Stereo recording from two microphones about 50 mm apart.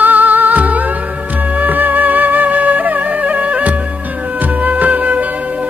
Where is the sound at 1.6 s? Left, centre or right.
Right.